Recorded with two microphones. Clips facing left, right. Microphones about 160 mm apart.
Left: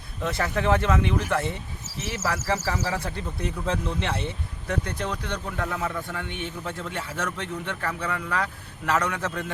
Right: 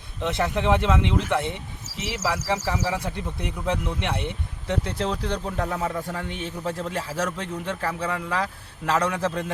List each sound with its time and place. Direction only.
0.2 s speech: 20° right (ahead or behind)
4.7 s a man's voice: 30° right (ahead or behind)